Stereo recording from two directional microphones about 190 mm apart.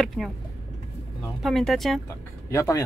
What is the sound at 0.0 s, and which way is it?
Speech, centre (ahead or behind).